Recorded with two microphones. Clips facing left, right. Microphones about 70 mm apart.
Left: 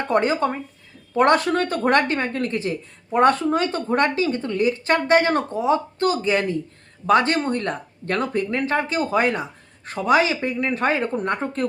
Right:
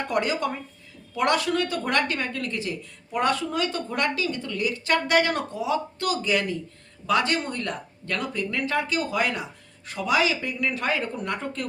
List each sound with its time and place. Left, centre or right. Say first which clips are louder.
0.1 s speech: left 7 dB; left